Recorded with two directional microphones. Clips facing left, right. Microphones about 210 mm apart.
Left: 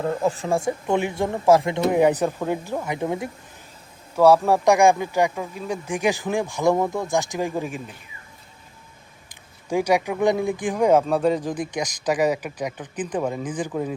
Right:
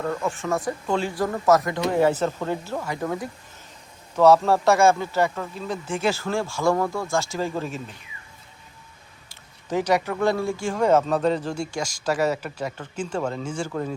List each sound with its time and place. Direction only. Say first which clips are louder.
0.0 s speech: left 3 dB; 30° left (ahead or behind)
1.9 s speech: left 2 dB; 15° left (ahead or behind)
4.1 s speech: left 1 dB; 10° left (ahead or behind)
9.3 s speech: left 2 dB; 10° left (ahead or behind)